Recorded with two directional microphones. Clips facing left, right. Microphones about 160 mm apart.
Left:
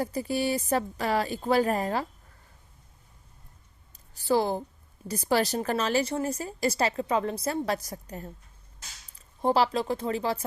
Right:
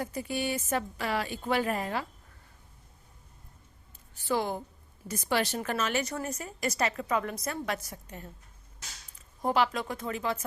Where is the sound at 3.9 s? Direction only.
35° left (ahead or behind).